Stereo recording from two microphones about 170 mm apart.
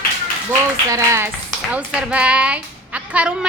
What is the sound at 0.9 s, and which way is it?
A woman's voice, 15° right (ahead or behind).